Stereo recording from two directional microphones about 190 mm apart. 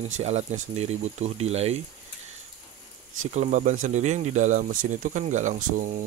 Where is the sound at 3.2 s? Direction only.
35° right (ahead or behind).